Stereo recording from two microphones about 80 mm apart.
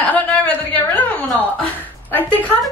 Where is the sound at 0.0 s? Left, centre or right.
Centre.